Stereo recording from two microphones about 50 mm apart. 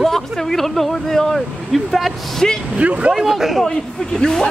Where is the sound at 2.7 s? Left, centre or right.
Right.